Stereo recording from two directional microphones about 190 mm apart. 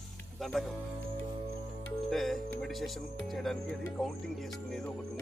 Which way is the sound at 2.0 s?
Centre (ahead or behind).